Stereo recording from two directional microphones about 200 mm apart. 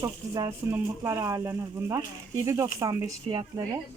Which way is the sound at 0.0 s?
15° right (ahead or behind).